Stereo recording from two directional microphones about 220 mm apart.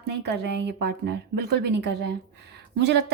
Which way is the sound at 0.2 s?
50° right (ahead or behind).